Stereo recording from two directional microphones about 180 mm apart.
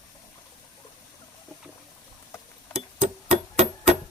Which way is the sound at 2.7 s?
30° right (ahead or behind).